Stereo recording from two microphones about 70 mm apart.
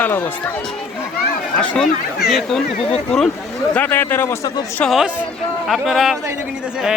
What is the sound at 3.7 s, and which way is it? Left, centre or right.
Speech, left.